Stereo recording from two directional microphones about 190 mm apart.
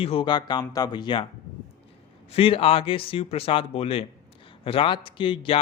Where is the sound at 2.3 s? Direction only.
30° left (ahead or behind).